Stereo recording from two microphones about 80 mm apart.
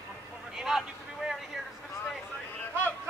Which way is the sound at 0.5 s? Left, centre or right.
Centre.